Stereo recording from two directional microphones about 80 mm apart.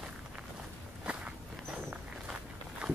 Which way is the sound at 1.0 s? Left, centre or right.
Centre.